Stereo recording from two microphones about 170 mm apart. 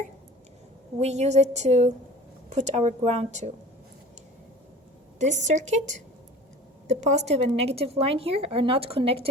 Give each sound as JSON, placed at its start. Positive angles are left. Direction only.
{"t": 0.9, "sound": "a woman's voice", "side_deg": -40}
{"t": 5.2, "sound": "a woman's voice", "side_deg": -45}